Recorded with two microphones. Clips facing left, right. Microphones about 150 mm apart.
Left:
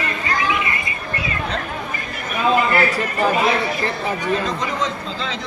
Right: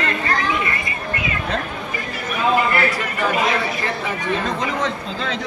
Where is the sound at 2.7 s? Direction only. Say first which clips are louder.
Left 2 dB; 40° left (ahead or behind).